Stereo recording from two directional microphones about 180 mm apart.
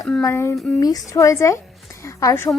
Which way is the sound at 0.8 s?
20° left (ahead or behind).